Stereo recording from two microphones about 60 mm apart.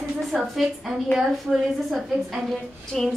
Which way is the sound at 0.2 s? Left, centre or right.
Centre.